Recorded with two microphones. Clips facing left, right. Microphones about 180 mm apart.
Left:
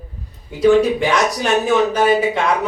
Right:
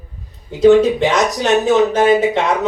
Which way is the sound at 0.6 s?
20° right (ahead or behind).